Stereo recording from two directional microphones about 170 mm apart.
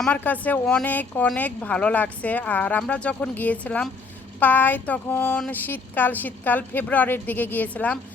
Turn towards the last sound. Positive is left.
turn(degrees=10)  # may be behind; listen again after turning